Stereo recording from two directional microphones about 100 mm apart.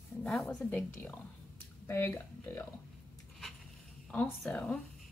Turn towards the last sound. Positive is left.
turn(degrees=10)  # may be behind; listen again after turning